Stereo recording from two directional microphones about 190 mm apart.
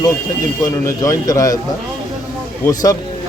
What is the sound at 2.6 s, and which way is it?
Speech, 15° left (ahead or behind).